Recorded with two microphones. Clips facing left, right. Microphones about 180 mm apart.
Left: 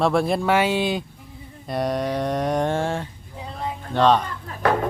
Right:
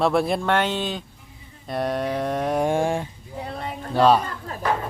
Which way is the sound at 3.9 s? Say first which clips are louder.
Right 1 dB; 10° right (ahead or behind).